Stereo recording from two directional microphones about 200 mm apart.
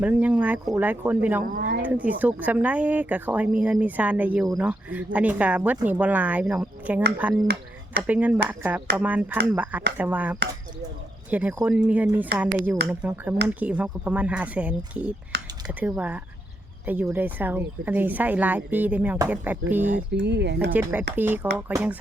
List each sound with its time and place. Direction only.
0.0 s speech: 5° right (ahead or behind)
1.5 s a sound: 45° right (ahead or behind)
1.8 s speech: 5° right (ahead or behind)
20.1 s speech: 60° right (ahead or behind)
21.2 s speech: 10° right (ahead or behind)